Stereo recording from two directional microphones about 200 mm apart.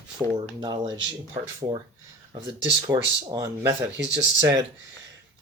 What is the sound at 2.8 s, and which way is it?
Speech, 20° right (ahead or behind).